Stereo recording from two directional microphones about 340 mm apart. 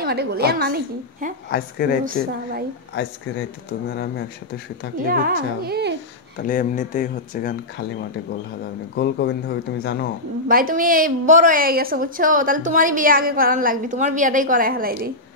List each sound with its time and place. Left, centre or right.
0.0 s a woman's voice: right
1.5 s speech: left
4.9 s a woman's voice: right
6.3 s speech: left
8.9 s speech: left
10.5 s a woman's voice: right